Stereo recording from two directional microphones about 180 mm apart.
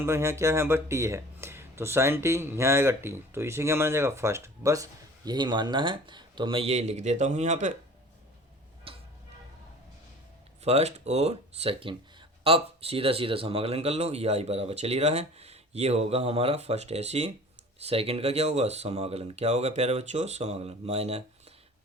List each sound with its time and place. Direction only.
0.0 s speech: 15° right (ahead or behind); by 7.7 s 40° right (ahead or behind)
8.9 s tick-tock: 30° right (ahead or behind)
10.6 s a man's voice: 35° right (ahead or behind)